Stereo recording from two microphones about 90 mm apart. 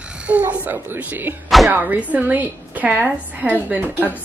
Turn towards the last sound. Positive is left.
turn(degrees=-20)  # may be behind; listen again after turning